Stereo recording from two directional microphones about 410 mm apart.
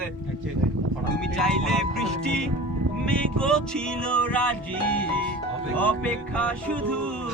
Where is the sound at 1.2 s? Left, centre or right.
Centre.